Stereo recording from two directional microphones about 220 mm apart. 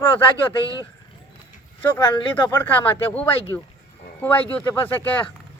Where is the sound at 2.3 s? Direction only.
10° left (ahead or behind).